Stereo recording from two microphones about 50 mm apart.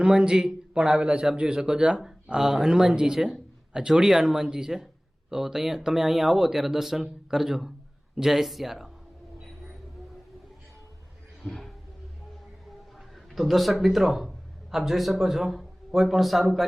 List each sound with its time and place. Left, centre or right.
0.0 s speech: centre
11.4 s speech: centre
13.0 s a man's voice: centre